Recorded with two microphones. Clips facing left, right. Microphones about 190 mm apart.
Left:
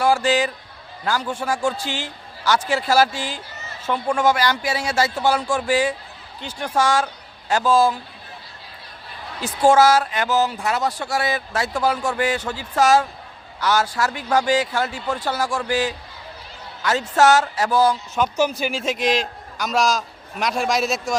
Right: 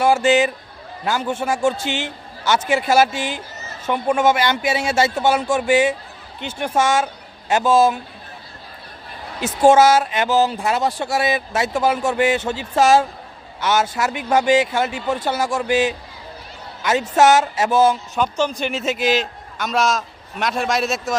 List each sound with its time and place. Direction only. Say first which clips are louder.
0.0 s speech: right 3 dB; 25° right (ahead or behind)
9.4 s speech: right 2 dB; 20° right (ahead or behind)
18.1 s a man's voice: even; 10° left (ahead or behind)